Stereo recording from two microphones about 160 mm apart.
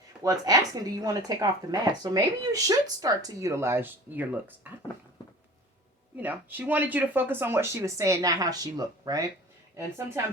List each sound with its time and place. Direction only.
0.2 s speech: 20° right (ahead or behind)
6.1 s speech: 10° right (ahead or behind)